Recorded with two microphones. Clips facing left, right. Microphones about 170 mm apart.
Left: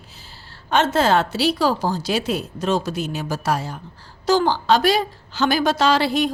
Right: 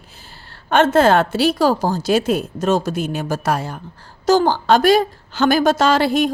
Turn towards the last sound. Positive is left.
turn(degrees=-50)  # may be behind; listen again after turning